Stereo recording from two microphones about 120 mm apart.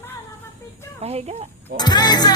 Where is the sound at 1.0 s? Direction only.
60° right (ahead or behind).